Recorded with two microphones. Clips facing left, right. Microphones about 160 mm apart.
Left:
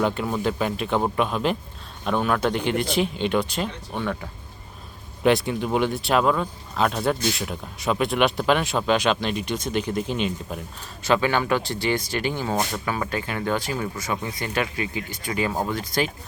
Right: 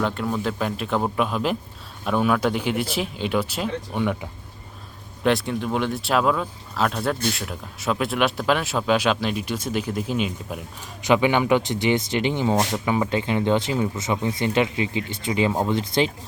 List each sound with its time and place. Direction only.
0.0 s speech: 5° left (ahead or behind); by 4.3 s 10° right (ahead or behind)
5.2 s speech: centre (ahead or behind)
11.0 s speech: 15° right (ahead or behind)